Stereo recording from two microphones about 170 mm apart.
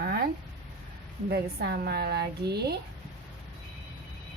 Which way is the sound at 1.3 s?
70° right (ahead or behind).